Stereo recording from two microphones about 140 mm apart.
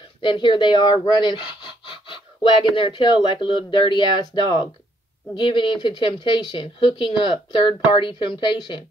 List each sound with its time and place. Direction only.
0.2 s speech: 35° left (ahead or behind)